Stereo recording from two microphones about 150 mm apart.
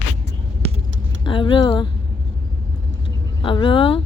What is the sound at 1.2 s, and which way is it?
Speech, 35° left (ahead or behind).